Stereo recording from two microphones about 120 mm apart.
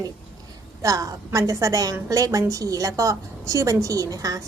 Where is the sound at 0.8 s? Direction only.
30° right (ahead or behind).